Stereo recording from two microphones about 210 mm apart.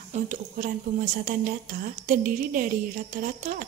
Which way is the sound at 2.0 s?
40° right (ahead or behind).